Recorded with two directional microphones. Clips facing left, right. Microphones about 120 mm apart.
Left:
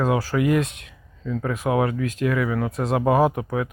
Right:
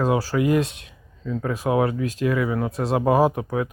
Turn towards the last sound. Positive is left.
turn(degrees=-25)  # may be behind; listen again after turning